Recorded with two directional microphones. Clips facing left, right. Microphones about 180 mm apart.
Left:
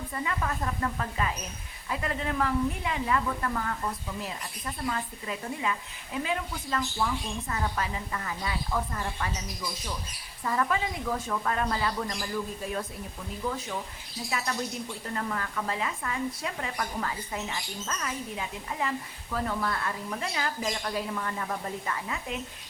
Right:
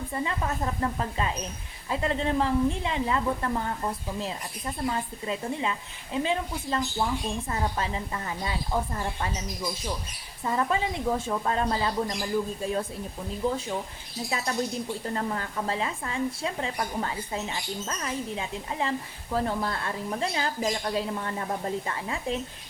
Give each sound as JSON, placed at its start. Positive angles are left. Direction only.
{"t": 0.1, "sound": "speech", "side_deg": -25}
{"t": 10.4, "sound": "speech", "side_deg": -25}
{"t": 13.4, "sound": "speech", "side_deg": -30}